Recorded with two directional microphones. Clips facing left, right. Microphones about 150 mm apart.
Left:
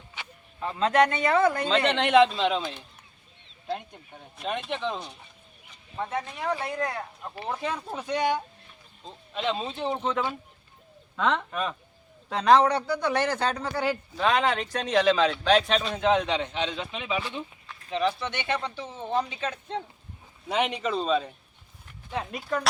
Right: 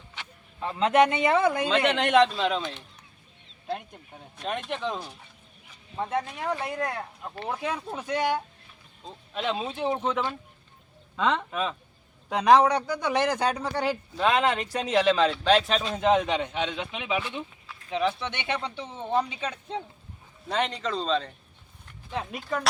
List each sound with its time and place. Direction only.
0.1 s a sound: 5° left (ahead or behind)
0.7 s speech: 15° right (ahead or behind)
1.6 s speech: 5° right (ahead or behind)
6.1 s speech: 5° right (ahead or behind)
12.3 s speech: 10° right (ahead or behind)
13.8 s speech: centre (ahead or behind)
17.7 s a sound: 10° right (ahead or behind)
18.3 s speech: 15° right (ahead or behind)
20.5 s a man's voice: 10° left (ahead or behind)